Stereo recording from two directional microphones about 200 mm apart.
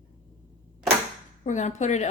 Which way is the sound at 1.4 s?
40° left (ahead or behind).